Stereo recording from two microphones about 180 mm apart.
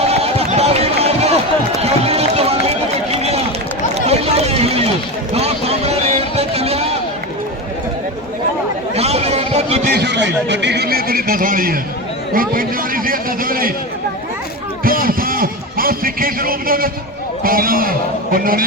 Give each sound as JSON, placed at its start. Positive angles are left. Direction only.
{"t": 0.0, "sound": "run", "side_deg": -35}
{"t": 5.3, "sound": "vehicle", "side_deg": -35}
{"t": 9.0, "sound": "a sound", "side_deg": -35}
{"t": 9.9, "sound": "a man's voice", "side_deg": -70}
{"t": 14.8, "sound": "a sound", "side_deg": -55}
{"t": 17.4, "sound": "a man's voice", "side_deg": -55}